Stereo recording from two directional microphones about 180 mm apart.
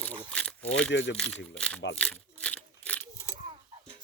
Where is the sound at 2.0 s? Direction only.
5° left (ahead or behind).